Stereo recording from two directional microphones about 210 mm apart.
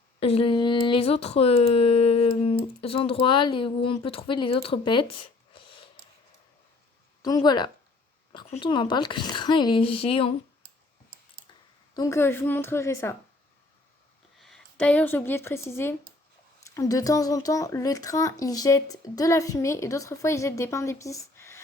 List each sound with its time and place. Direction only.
0.2 s speech: 25° left (ahead or behind)
7.2 s speech: 20° left (ahead or behind)
11.9 s speech: 15° left (ahead or behind)
14.3 s speech: centre (ahead or behind)